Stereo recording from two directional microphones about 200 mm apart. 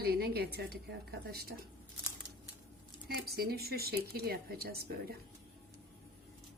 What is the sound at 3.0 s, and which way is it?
Speech, 50° right (ahead or behind).